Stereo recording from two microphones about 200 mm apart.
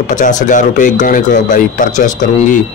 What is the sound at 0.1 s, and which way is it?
Speech, 40° left (ahead or behind).